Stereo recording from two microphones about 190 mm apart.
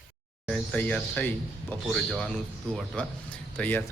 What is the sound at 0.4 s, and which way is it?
A man's voice, 5° left (ahead or behind).